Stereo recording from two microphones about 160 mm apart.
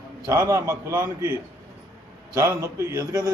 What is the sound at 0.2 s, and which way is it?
A man's voice, 20° right (ahead or behind).